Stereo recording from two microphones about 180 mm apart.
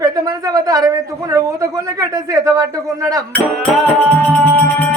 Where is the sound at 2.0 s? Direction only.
20° right (ahead or behind).